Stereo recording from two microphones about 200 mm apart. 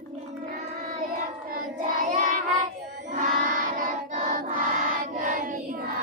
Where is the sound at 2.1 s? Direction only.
40° right (ahead or behind).